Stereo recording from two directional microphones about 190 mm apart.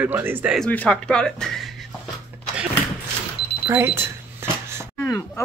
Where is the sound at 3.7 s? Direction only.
10° right (ahead or behind).